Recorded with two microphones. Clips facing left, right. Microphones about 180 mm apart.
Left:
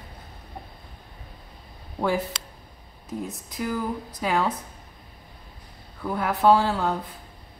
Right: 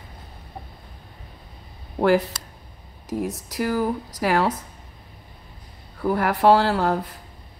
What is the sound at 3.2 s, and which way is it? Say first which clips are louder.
Speech: right 5 dB; 80° right.